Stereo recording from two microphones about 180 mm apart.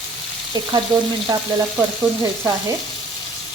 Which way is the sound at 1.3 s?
20° right (ahead or behind).